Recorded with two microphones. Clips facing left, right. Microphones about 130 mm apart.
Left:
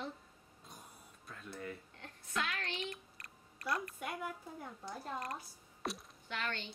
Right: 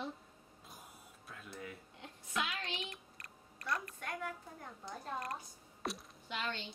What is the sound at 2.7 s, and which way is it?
Speech, centre (ahead or behind).